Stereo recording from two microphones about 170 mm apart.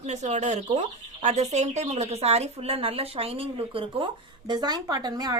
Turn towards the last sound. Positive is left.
turn(degrees=-20)  # may be behind; listen again after turning